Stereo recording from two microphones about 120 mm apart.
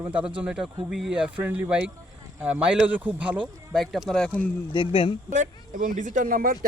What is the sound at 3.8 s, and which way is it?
Speech, centre (ahead or behind).